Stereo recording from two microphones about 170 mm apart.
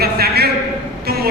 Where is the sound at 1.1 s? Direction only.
65° right (ahead or behind).